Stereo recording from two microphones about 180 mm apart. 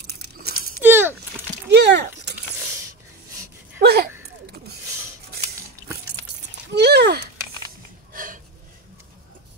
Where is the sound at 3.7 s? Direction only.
60° right (ahead or behind).